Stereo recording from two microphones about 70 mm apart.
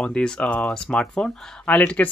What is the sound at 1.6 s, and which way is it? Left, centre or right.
Speech, left.